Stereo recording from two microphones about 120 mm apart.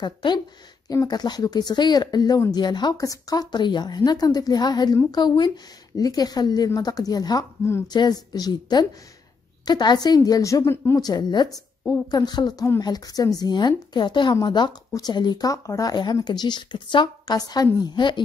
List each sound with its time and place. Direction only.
0.0 s speech: 40° left (ahead or behind); by 11.0 s 25° left (ahead or behind)
11.0 s speech: 35° left (ahead or behind)